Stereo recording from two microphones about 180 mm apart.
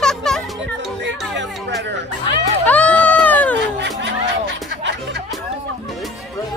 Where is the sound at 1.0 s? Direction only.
80° right.